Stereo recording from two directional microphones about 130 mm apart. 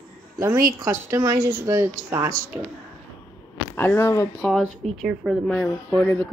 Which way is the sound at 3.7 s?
20° left (ahead or behind).